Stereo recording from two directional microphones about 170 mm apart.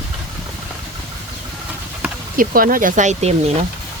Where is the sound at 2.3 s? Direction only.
55° right (ahead or behind).